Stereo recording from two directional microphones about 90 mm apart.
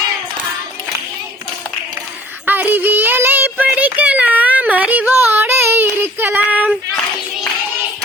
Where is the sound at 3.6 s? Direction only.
15° right (ahead or behind).